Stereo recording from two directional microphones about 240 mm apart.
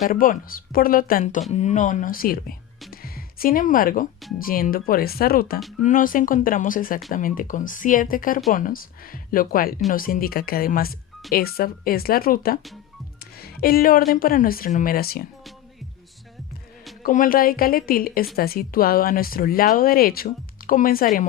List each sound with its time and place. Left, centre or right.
0.0 s speech: left
2.9 s music: left
4.4 s speech: left
17.0 s speech: left